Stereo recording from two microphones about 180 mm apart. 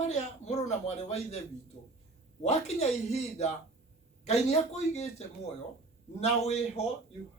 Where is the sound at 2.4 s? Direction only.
35° left (ahead or behind).